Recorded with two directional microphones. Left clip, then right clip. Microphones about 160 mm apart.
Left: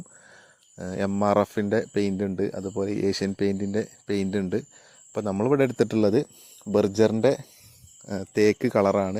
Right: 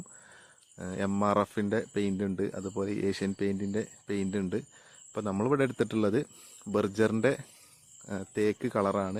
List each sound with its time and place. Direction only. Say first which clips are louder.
0.3 s cricket: left 3 dB; 30° left (ahead or behind)
1.1 s speech: left 6 dB; 25° left (ahead or behind)
8.0 s speech: left 8 dB; 35° left (ahead or behind)